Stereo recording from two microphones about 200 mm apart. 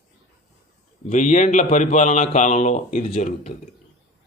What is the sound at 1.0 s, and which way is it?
Speech, 40° left (ahead or behind).